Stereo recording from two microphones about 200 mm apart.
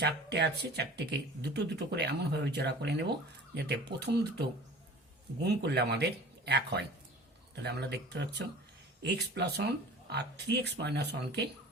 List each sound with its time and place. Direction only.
0.0 s speech: 55° right (ahead or behind)